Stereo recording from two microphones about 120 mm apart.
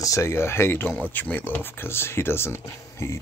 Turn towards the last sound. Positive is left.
turn(degrees=20)  # may be behind; listen again after turning